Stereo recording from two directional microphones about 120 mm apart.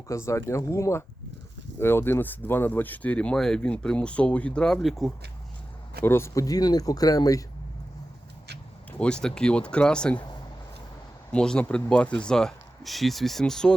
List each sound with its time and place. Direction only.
0.1 s speech: 25° left (ahead or behind); by 5.1 s centre (ahead or behind)
6.1 s speech: 20° left (ahead or behind)
9.0 s speech: 5° left (ahead or behind)
11.3 s speech: 10° left (ahead or behind)